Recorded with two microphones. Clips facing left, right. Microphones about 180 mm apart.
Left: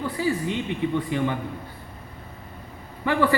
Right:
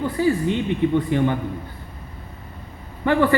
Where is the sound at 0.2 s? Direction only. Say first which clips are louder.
Right 6 dB; 55° right (ahead or behind).